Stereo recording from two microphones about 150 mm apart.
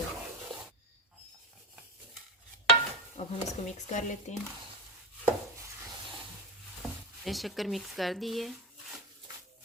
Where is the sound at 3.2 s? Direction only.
45° left (ahead or behind).